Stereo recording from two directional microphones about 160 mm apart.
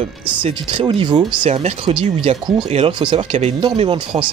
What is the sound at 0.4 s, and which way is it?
Speech, 35° right (ahead or behind).